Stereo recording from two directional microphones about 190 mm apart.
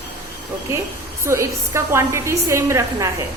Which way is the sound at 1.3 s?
15° right (ahead or behind).